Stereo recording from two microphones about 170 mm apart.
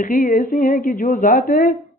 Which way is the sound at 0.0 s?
50° left (ahead or behind).